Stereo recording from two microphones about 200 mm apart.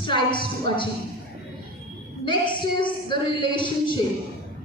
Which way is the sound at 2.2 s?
25° left (ahead or behind).